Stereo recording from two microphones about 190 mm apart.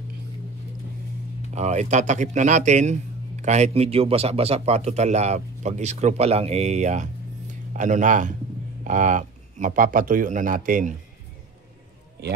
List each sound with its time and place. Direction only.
1.5 s a man's voice: 35° right (ahead or behind)